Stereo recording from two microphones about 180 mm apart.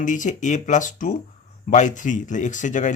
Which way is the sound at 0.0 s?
45° left (ahead or behind).